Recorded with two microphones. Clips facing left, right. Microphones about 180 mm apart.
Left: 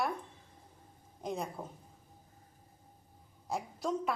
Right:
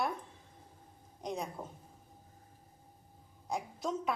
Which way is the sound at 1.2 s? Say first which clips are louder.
Left 1 dB; centre (ahead or behind).